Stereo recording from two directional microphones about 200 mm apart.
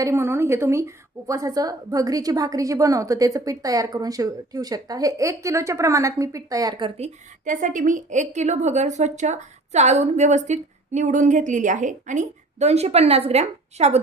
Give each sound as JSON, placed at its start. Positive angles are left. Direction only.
{"t": 0.0, "sound": "a woman's voice", "side_deg": -15}